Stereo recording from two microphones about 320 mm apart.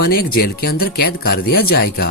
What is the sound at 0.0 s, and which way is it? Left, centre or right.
Speech, left.